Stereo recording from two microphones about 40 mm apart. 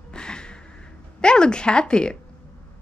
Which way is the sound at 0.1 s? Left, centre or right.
Left.